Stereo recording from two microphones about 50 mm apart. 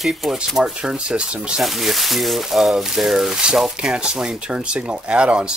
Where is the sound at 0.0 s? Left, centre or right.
Centre.